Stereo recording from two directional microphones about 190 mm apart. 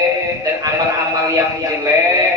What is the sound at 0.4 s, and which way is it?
Music, 20° right (ahead or behind).